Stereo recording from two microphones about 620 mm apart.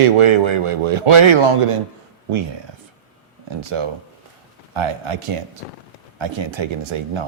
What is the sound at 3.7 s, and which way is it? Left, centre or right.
Speech, right.